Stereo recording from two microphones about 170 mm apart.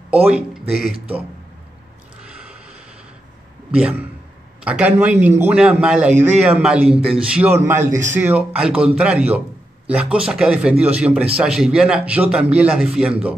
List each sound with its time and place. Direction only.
0.3 s a man's voice: 5° right (ahead or behind)
2.2 s snort: 5° right (ahead or behind)
3.7 s a man's voice: 5° right (ahead or behind)
7.9 s speech: 45° right (ahead or behind)
8.2 s a man's voice: 10° right (ahead or behind)